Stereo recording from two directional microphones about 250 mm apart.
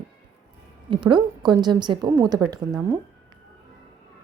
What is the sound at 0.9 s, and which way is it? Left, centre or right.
A woman's voice, centre.